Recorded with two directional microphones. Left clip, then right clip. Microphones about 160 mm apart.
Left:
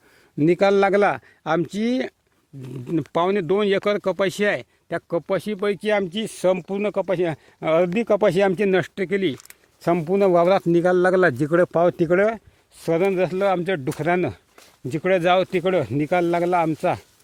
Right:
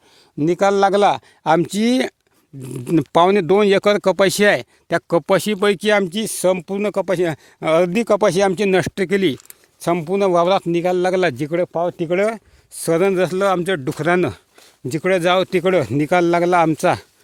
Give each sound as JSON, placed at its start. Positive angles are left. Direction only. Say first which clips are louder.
{"t": 0.3, "sound": "a man's voice", "louder": "right 2 dB", "side_deg": -10}
{"t": 1.0, "sound": "speech", "louder": "right 6 dB", "side_deg": -25}
{"t": 1.7, "sound": "speech", "louder": "right 6 dB", "side_deg": -65}
{"t": 2.6, "sound": "speech", "louder": "right 7 dB", "side_deg": -50}
{"t": 6.9, "sound": "speech", "louder": "right 4 dB", "side_deg": -90}
{"t": 8.0, "sound": "speech", "louder": "right 3 dB", "side_deg": -30}
{"t": 9.0, "sound": "speech", "louder": "right 5 dB", "side_deg": -60}
{"t": 9.5, "sound": "speech", "louder": "right 2 dB", "side_deg": -25}
{"t": 10.7, "sound": "a man's voice", "louder": "even", "side_deg": -5}
{"t": 11.7, "sound": "speech", "louder": "left 2 dB", "side_deg": 15}
{"t": 12.1, "sound": "speech", "louder": "right 3 dB", "side_deg": -30}
{"t": 12.8, "sound": "speech", "louder": "right 4 dB", "side_deg": -90}
{"t": 14.8, "sound": "speech", "louder": "right 2 dB", "side_deg": -55}